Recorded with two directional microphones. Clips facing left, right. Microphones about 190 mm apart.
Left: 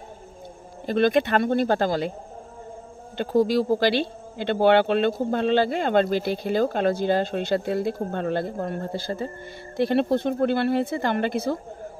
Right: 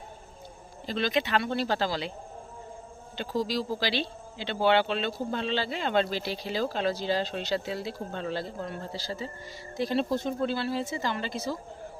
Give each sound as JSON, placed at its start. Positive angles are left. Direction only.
{"t": 0.8, "sound": "speech", "side_deg": 55}
{"t": 3.2, "sound": "speech", "side_deg": 55}